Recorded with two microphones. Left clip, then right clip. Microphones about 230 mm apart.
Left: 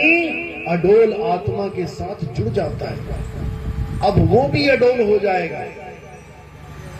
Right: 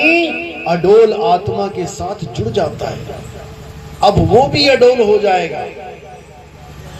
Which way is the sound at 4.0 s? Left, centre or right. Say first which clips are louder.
Right 6 dB; right.